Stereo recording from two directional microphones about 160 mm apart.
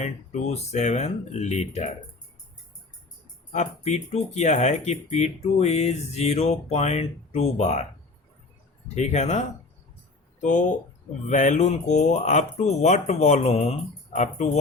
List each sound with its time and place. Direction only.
0.0 s speech: 45° left (ahead or behind)
3.5 s speech: 45° left (ahead or behind)
9.0 s speech: 45° left (ahead or behind)
10.4 s speech: 50° left (ahead or behind)